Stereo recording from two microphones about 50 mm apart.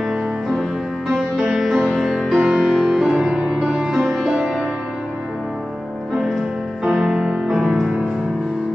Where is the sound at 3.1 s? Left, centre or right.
Centre.